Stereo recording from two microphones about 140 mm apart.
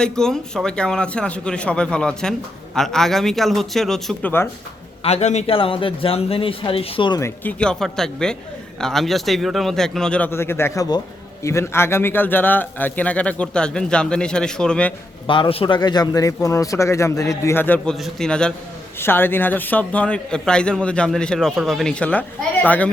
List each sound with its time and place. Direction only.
0.0 s a man's voice: 5° left (ahead or behind)
5.0 s a man's voice: 55° left (ahead or behind); by 7.2 s 40° left (ahead or behind)
7.2 s a man's voice: 20° left (ahead or behind)
7.6 s a man's voice: 5° left (ahead or behind)
15.3 s a man's voice: 40° left (ahead or behind); by 17.9 s 15° left (ahead or behind)
17.9 s a man's voice: centre (ahead or behind)